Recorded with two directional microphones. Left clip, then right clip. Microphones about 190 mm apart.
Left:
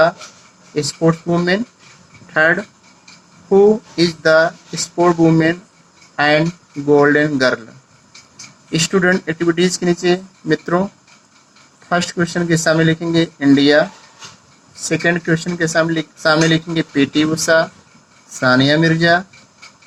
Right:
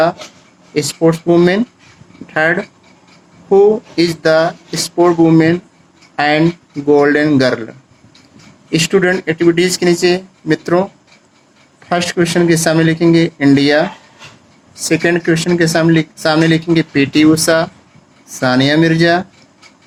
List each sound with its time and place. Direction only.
0.7 s speech: 40° right (ahead or behind)
8.7 s speech: 40° right (ahead or behind)
11.9 s speech: 40° right (ahead or behind)